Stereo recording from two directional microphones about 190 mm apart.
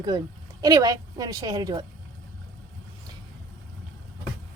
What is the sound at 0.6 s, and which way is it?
A woman's voice, 20° right (ahead or behind).